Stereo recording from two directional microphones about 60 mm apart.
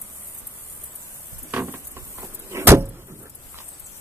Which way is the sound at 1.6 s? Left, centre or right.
Right.